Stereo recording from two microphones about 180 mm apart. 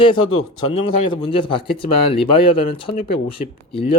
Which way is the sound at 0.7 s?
30° left (ahead or behind).